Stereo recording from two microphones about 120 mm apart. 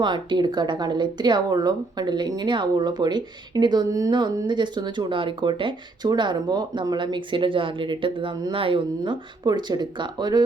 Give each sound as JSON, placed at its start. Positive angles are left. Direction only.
{"t": 0.0, "sound": "speech", "side_deg": -40}